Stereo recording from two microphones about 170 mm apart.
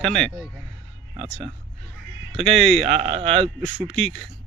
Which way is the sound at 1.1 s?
35° right (ahead or behind).